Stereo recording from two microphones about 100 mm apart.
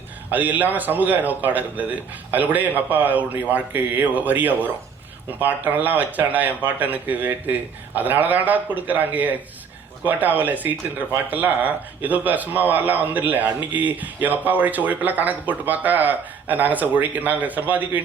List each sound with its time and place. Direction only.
0.3 s speech: 15° right (ahead or behind)